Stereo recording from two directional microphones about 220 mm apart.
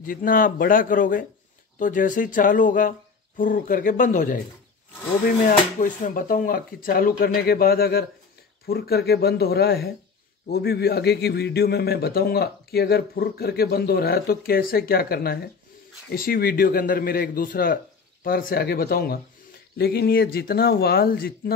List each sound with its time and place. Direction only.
0.0 s speech: 40° left (ahead or behind)
5.8 s a man's voice: 40° left (ahead or behind)